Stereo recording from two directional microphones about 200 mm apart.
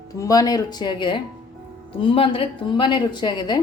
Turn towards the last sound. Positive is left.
turn(degrees=20)  # may be behind; listen again after turning